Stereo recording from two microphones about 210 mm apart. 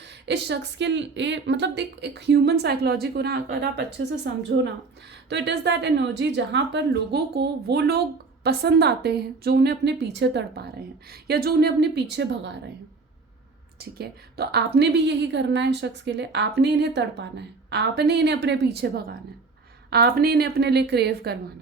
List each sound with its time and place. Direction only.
0.3 s a woman's voice: 55° right (ahead or behind)
13.7 s a woman's voice: 50° right (ahead or behind)